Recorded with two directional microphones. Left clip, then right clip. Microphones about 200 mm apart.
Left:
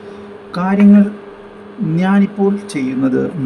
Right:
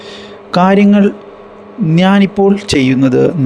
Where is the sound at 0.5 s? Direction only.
40° right (ahead or behind).